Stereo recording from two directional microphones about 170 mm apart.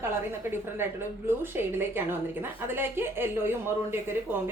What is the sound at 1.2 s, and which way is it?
A woman's voice, 15° right (ahead or behind).